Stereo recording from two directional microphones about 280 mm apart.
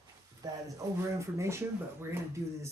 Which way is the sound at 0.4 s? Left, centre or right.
Centre.